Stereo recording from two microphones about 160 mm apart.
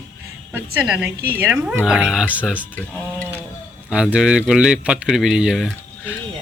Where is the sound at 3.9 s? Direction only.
5° right (ahead or behind).